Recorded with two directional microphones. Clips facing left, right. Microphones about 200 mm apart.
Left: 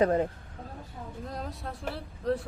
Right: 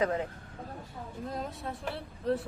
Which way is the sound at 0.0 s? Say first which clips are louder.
Left 5 dB; 40° left (ahead or behind).